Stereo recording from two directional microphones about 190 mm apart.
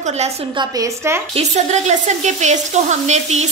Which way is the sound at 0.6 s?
15° right (ahead or behind).